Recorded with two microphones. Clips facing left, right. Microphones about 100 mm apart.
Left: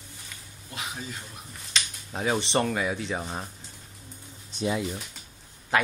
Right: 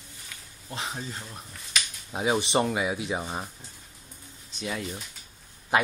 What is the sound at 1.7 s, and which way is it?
Speech, 10° right (ahead or behind).